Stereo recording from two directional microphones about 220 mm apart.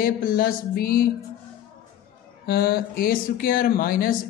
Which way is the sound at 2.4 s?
45° left (ahead or behind).